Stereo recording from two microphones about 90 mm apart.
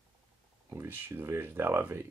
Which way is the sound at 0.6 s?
25° right (ahead or behind).